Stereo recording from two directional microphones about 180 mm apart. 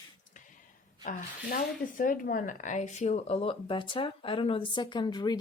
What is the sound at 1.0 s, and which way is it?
A woman's voice, 50° left (ahead or behind).